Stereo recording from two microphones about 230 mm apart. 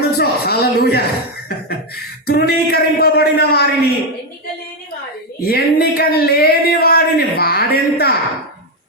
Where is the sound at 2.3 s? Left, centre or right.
Left.